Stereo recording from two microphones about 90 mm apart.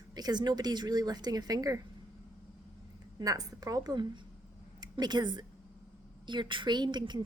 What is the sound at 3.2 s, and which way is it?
A woman's voice, 45° right (ahead or behind).